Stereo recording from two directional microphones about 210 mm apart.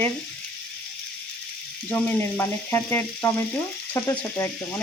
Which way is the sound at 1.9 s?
10° left (ahead or behind).